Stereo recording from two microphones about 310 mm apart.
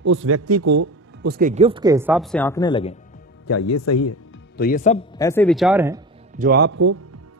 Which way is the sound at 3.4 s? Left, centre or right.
Left.